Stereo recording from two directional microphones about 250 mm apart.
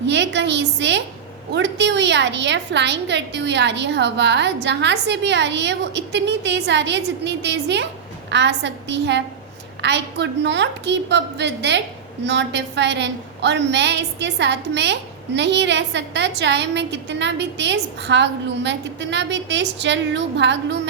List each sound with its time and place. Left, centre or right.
0.0 s a woman's voice: right